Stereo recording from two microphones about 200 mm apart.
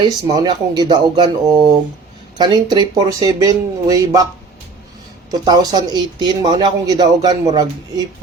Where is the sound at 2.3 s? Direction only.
20° right (ahead or behind).